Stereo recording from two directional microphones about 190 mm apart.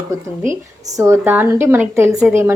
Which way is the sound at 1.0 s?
10° right (ahead or behind).